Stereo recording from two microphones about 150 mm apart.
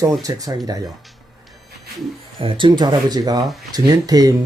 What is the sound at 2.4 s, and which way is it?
Speech, 35° right (ahead or behind).